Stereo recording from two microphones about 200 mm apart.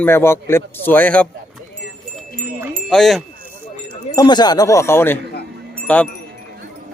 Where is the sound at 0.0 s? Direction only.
10° left (ahead or behind).